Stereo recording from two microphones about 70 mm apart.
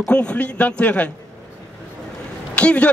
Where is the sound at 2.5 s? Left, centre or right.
Centre.